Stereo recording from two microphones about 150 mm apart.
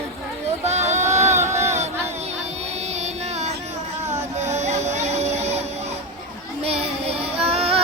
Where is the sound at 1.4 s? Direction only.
20° right (ahead or behind).